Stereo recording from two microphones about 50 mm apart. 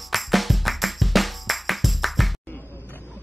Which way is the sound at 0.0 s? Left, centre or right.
Centre.